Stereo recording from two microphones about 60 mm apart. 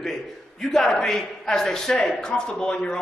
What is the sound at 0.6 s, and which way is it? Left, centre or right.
A man's voice, centre.